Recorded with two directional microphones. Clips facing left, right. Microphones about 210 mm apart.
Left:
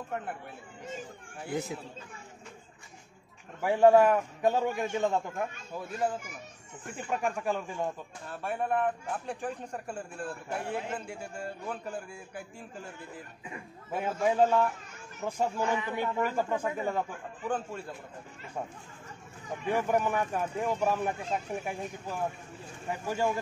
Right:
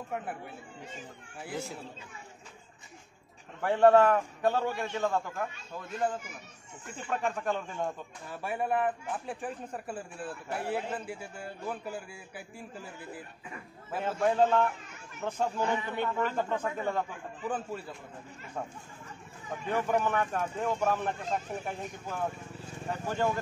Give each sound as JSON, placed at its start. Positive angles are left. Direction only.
{"t": 0.1, "sound": "a man's voice", "side_deg": -5}
{"t": 3.6, "sound": "a man's voice", "side_deg": 10}
{"t": 5.8, "sound": "a man's voice", "side_deg": 5}
{"t": 8.3, "sound": "a man's voice", "side_deg": -10}
{"t": 13.9, "sound": "speech", "side_deg": 10}
{"t": 19.7, "sound": "speech", "side_deg": 10}